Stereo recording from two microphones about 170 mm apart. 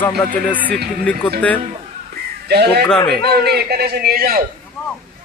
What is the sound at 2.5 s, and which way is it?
A man's voice, 70° right (ahead or behind).